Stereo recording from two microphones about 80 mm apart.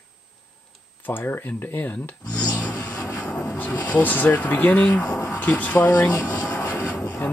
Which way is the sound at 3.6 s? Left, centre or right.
Left.